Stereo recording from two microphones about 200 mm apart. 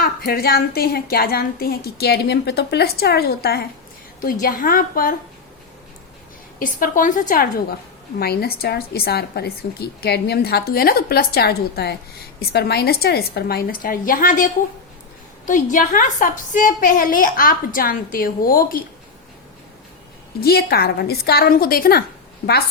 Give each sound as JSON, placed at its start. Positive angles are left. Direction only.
{"t": 0.0, "sound": "a woman's voice", "side_deg": 50}
{"t": 6.6, "sound": "a woman's voice", "side_deg": 45}
{"t": 20.4, "sound": "a woman's voice", "side_deg": 50}